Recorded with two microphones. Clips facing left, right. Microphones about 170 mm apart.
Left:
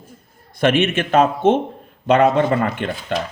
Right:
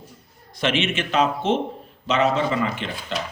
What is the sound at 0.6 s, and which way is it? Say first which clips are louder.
Speech: left 6 dB; 55° left (ahead or behind).